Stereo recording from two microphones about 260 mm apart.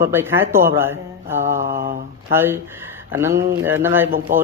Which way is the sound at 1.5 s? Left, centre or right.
Right.